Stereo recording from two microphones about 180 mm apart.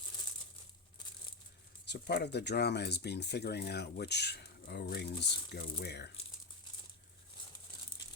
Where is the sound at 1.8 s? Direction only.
70° left (ahead or behind).